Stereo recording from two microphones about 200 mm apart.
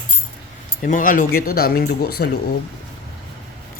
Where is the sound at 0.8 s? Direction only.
45° left (ahead or behind).